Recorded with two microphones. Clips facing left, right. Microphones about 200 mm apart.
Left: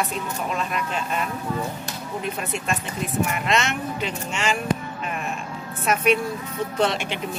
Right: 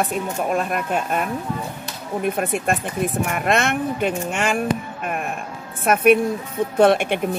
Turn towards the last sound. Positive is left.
turn(degrees=-55)  # may be behind; listen again after turning